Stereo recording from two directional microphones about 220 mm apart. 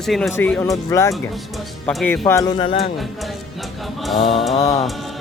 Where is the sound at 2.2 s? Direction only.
15° left (ahead or behind).